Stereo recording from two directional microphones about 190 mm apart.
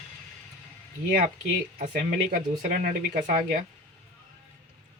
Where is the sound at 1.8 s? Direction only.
50° right (ahead or behind).